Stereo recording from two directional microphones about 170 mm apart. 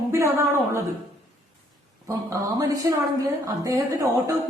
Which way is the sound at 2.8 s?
20° right (ahead or behind).